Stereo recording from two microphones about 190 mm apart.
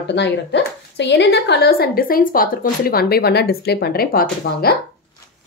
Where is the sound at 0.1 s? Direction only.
65° left (ahead or behind); by 4.7 s 50° left (ahead or behind).